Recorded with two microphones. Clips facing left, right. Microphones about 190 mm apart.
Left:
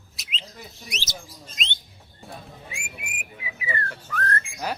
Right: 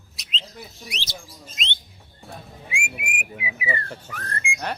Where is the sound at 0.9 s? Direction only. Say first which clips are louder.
Even; 45° left (ahead or behind).